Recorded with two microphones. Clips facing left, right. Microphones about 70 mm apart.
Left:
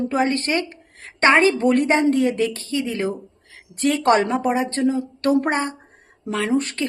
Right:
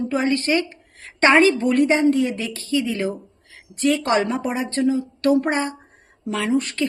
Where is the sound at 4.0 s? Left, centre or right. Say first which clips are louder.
Left 3 dB; left.